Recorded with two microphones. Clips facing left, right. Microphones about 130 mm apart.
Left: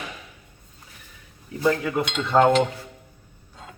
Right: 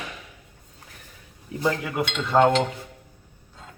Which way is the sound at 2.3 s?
Centre (ahead or behind).